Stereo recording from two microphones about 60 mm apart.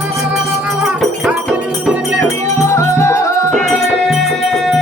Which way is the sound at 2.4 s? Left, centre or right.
Left.